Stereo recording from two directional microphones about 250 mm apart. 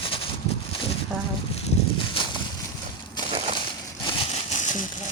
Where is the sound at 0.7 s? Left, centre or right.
Centre.